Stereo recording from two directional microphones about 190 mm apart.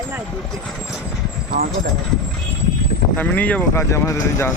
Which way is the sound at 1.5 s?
40° right (ahead or behind).